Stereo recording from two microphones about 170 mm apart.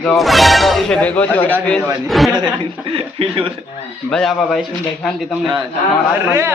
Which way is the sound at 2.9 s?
35° right (ahead or behind).